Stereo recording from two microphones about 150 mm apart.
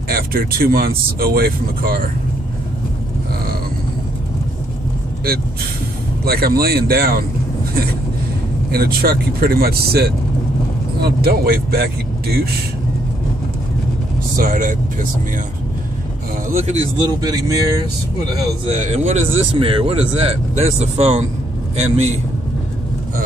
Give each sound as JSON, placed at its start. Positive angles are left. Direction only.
{"t": 0.1, "sound": "speech", "side_deg": -90}
{"t": 6.2, "sound": "speech", "side_deg": -90}
{"t": 8.7, "sound": "speech", "side_deg": -90}
{"t": 14.3, "sound": "speech", "side_deg": -65}
{"t": 16.5, "sound": "speech", "side_deg": -45}
{"t": 17.2, "sound": "speech", "side_deg": -25}
{"t": 18.7, "sound": "speech", "side_deg": -50}
{"t": 19.6, "sound": "speech", "side_deg": -35}